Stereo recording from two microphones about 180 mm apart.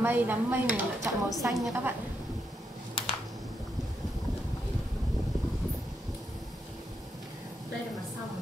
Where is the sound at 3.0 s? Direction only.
30° left (ahead or behind).